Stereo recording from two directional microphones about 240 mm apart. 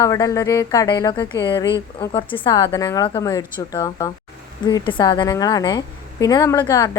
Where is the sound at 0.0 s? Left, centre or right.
Centre.